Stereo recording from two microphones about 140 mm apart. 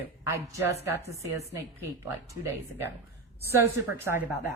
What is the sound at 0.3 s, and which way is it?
Speech, 20° right (ahead or behind).